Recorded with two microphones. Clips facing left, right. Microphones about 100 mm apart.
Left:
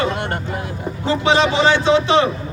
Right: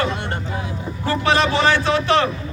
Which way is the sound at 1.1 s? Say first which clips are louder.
Left 2 dB; 20° left (ahead or behind).